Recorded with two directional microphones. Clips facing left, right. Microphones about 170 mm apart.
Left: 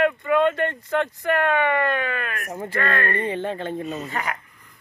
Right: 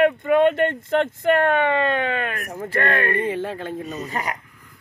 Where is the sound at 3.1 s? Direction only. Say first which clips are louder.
Right 2 dB; 5° right (ahead or behind).